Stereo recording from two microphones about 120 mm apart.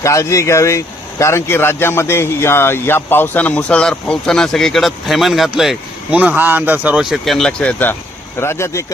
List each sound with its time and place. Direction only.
0.0 s speech: 25° left (ahead or behind); by 7.0 s 15° right (ahead or behind)
7.0 s speech: centre (ahead or behind); by 8.8 s 20° left (ahead or behind)